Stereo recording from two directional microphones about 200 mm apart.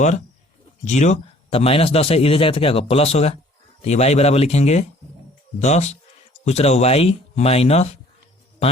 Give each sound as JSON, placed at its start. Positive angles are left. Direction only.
{"t": 0.9, "sound": "speech", "side_deg": 35}